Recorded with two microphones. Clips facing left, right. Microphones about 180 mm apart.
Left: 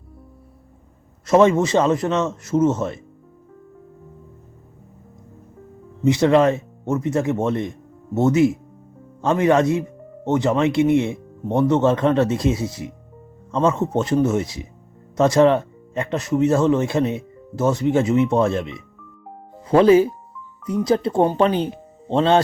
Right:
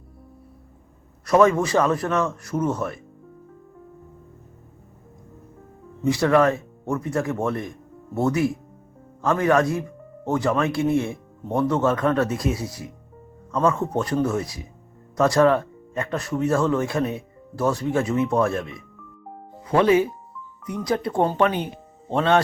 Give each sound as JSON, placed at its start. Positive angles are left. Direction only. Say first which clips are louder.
{"t": 1.3, "sound": "speech", "louder": "left 3 dB", "side_deg": 25}
{"t": 6.1, "sound": "speech", "louder": "left 3 dB", "side_deg": 20}